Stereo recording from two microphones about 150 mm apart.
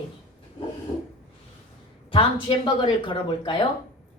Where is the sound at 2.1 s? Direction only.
35° left (ahead or behind).